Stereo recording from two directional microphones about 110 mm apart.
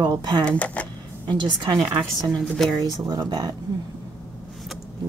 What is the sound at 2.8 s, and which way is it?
Speech, 35° right (ahead or behind).